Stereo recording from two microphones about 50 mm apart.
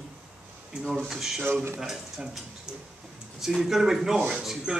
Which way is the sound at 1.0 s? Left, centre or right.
Centre.